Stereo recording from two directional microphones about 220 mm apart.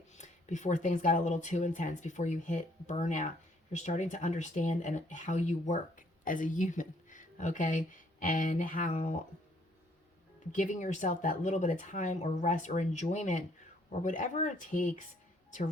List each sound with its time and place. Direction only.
0.1 s speech: 35° left (ahead or behind)
10.5 s speech: 35° left (ahead or behind)